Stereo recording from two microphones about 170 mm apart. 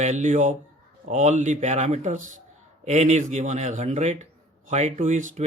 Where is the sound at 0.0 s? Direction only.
45° right (ahead or behind).